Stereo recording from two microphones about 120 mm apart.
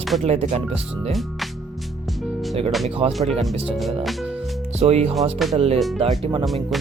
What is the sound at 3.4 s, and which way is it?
Speech, centre (ahead or behind).